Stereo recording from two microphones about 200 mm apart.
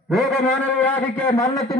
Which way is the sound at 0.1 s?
Centre (ahead or behind).